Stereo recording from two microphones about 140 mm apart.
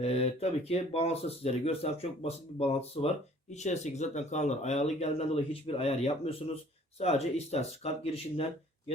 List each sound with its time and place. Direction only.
0.0 s speech: 45° left (ahead or behind)